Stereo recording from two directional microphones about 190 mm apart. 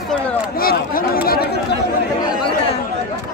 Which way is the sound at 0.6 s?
50° left (ahead or behind).